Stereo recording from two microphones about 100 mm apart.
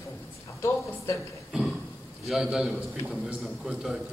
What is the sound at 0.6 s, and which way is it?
Speech, 30° left (ahead or behind).